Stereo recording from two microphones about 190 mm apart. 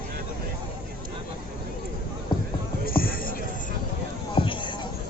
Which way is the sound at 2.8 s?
50° left (ahead or behind).